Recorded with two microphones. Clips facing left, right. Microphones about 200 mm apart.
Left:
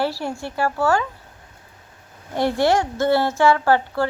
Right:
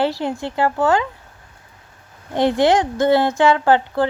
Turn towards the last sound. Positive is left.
turn(degrees=-20)  # may be behind; listen again after turning